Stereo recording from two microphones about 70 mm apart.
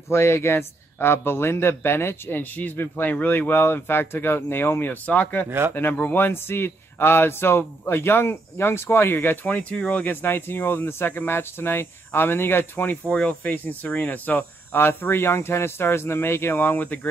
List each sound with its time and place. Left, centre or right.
0.1 s speech: left